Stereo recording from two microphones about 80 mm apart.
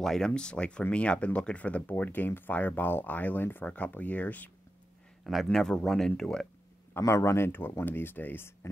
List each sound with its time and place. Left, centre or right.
0.0 s speech: centre
5.2 s speech: centre
7.0 s speech: left